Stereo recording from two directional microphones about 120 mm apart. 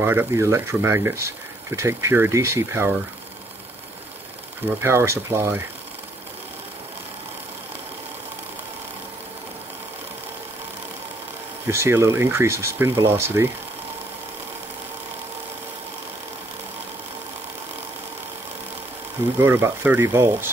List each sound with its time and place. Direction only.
0.0 s speech: 20° right (ahead or behind)
4.8 s speech: 20° right (ahead or behind)
11.7 s speech: 20° right (ahead or behind)
19.4 s speech: 20° right (ahead or behind)